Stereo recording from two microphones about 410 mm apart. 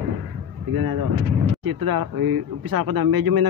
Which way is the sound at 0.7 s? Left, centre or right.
Right.